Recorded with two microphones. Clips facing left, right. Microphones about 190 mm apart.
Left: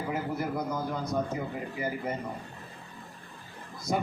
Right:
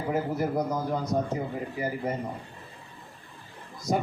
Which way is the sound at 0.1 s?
40° right (ahead or behind).